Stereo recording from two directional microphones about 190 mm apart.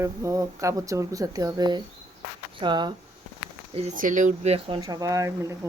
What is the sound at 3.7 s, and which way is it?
Speech, 35° right (ahead or behind).